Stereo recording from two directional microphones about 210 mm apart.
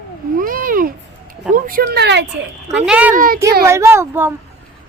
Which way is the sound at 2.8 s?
5° right (ahead or behind).